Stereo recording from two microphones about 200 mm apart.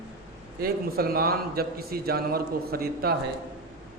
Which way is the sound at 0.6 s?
50° right (ahead or behind).